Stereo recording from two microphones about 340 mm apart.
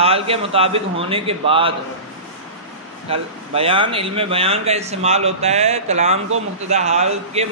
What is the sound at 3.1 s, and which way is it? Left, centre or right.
Speech, centre.